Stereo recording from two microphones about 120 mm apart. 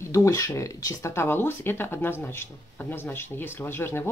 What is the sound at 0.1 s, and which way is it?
Speech, 25° left (ahead or behind).